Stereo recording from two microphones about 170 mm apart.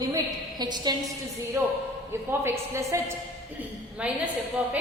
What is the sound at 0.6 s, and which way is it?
Speech, 25° right (ahead or behind).